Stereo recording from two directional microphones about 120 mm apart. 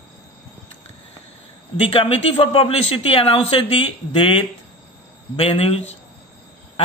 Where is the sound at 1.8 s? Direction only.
55° left (ahead or behind).